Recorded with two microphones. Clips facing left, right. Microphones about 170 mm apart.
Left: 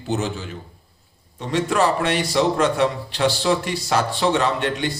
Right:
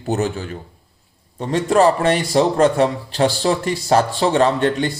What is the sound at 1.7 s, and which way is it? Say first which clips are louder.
Speech: right 6 dB; 40° right (ahead or behind).